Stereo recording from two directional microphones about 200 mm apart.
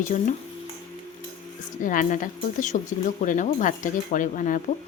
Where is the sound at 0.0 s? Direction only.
40° left (ahead or behind).